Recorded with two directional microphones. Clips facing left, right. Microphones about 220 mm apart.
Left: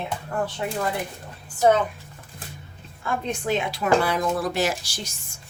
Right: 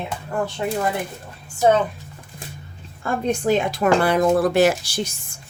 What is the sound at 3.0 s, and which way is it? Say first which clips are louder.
Speech: right 6 dB; 45° right (ahead or behind).